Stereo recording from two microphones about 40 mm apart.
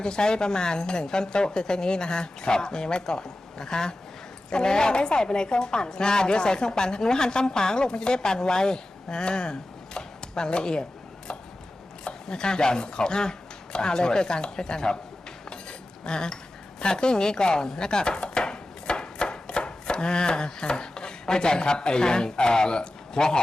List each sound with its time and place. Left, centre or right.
0.0 s a woman's voice: centre
12.0 s a woman's voice: centre
16.0 s a woman's voice: left
16.8 s chopping: left